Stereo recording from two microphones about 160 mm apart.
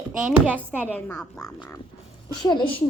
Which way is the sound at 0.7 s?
10° left (ahead or behind).